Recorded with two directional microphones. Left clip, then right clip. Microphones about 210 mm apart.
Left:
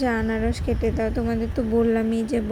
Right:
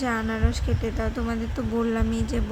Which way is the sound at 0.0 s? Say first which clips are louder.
Left 3 dB; 10° left (ahead or behind).